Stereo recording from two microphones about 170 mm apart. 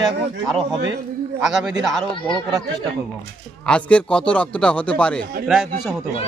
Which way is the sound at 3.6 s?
5° left (ahead or behind).